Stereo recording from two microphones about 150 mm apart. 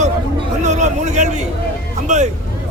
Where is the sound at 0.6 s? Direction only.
50° right (ahead or behind).